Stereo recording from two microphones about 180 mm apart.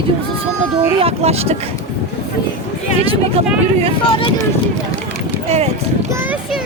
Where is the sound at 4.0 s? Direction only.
30° left (ahead or behind).